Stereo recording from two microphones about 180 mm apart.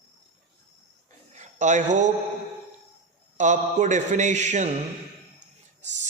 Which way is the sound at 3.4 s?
45° right (ahead or behind).